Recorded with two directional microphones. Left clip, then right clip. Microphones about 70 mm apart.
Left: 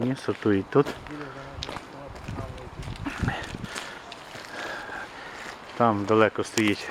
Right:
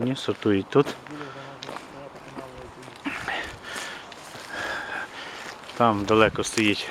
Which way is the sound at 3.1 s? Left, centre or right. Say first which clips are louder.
Right 3 dB; centre.